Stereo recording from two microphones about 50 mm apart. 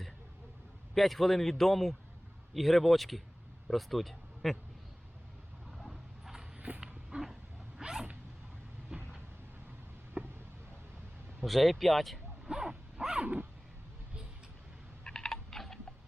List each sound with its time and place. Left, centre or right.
0.9 s a man's voice: centre
5.7 s vehicle: centre
6.6 s dog: right
6.8 s dog: centre
7.8 s vehicle: centre
10.2 s a sound: right
11.4 s a man's voice: centre
12.5 s zipper: centre
13.2 s dog: right
15.0 s typing: centre